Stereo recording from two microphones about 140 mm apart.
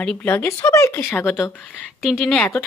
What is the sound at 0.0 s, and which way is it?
Speech, 5° left (ahead or behind).